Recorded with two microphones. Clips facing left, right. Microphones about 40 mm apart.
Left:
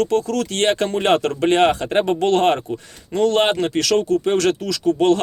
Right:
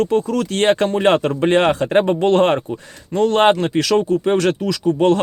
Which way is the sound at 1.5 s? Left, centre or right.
Right.